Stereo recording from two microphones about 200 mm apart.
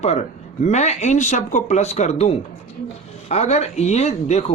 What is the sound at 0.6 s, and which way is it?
Speech, 35° left (ahead or behind).